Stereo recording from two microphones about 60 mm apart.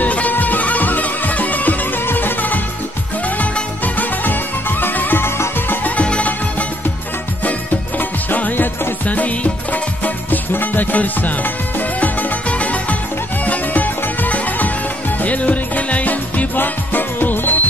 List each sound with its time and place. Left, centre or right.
0.0 s music: left
5.9 s music: left
8.0 s music: left